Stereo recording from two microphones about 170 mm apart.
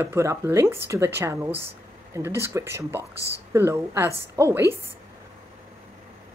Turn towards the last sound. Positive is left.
turn(degrees=-15)  # may be behind; listen again after turning